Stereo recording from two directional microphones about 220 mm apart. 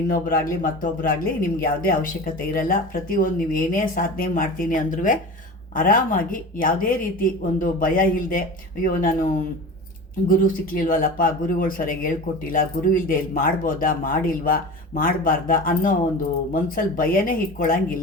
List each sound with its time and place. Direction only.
0.1 s speech: 40° left (ahead or behind)
10.2 s speech: 40° left (ahead or behind)